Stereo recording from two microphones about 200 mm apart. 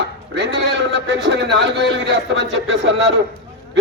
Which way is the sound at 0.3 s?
60° right (ahead or behind).